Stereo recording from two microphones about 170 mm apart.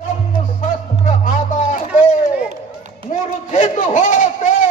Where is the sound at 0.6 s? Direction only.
50° left (ahead or behind).